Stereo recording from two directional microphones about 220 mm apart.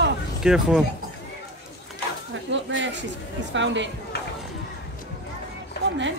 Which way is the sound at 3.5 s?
55° right (ahead or behind).